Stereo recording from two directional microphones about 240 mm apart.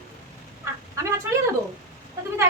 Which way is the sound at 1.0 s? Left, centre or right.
Centre.